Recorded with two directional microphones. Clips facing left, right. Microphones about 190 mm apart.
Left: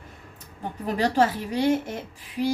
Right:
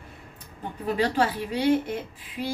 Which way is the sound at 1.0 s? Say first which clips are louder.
Left 3 dB; 45° left (ahead or behind).